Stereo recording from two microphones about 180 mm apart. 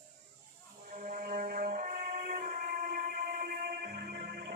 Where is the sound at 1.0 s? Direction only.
50° right (ahead or behind).